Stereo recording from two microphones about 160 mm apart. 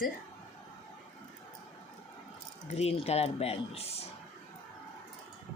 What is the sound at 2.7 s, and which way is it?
Speech, 40° left (ahead or behind).